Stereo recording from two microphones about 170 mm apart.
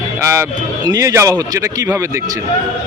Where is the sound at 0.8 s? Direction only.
20° right (ahead or behind).